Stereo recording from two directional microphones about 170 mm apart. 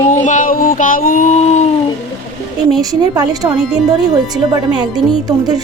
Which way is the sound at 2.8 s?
20° right (ahead or behind).